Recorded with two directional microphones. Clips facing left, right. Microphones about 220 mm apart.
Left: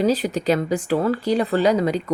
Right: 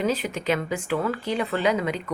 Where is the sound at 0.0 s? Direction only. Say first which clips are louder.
Left 6 dB; 35° left (ahead or behind).